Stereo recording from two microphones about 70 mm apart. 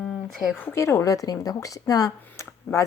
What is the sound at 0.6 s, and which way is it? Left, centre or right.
Speech, left.